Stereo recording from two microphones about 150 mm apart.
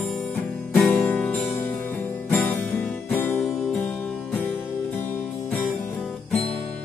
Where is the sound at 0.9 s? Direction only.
15° left (ahead or behind).